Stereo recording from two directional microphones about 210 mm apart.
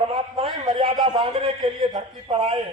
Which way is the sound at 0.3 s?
25° right (ahead or behind).